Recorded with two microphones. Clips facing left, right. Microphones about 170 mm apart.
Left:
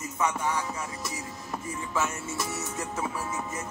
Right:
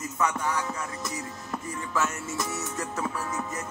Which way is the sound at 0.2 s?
25° left (ahead or behind).